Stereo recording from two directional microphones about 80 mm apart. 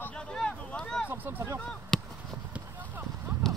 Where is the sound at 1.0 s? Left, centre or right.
Right.